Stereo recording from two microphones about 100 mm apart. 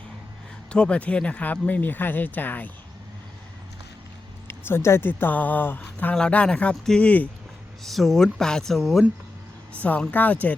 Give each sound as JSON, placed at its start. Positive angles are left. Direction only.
{"t": 0.7, "sound": "speech", "side_deg": 10}
{"t": 4.4, "sound": "speech", "side_deg": 25}
{"t": 7.9, "sound": "speech", "side_deg": 0}
{"t": 9.7, "sound": "speech", "side_deg": 15}